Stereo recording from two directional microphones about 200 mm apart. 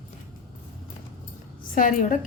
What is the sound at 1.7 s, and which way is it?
Speech, 40° left (ahead or behind).